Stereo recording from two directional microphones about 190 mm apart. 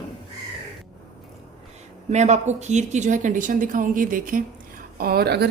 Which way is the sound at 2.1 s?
35° right (ahead or behind).